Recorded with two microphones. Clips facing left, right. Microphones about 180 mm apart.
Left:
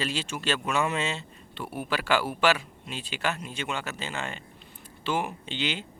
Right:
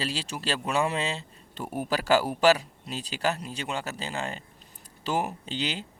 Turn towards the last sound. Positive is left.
turn(degrees=-35)  # may be behind; listen again after turning